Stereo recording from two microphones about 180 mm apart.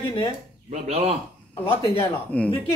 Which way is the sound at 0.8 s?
35° right (ahead or behind).